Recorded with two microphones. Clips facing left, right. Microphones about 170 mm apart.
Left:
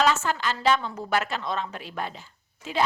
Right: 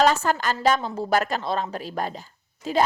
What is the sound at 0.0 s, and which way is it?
A woman's voice, 40° right (ahead or behind).